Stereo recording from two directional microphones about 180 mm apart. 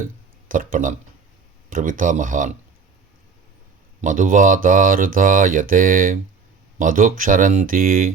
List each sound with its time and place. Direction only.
0.0 s speech: 50° right (ahead or behind)
4.0 s speech: 45° right (ahead or behind)